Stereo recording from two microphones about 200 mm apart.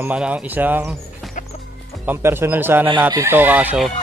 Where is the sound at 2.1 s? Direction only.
10° right (ahead or behind).